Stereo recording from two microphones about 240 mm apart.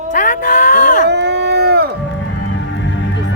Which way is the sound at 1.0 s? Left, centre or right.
Right.